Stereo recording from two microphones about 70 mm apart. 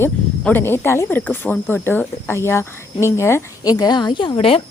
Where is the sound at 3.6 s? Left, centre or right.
Left.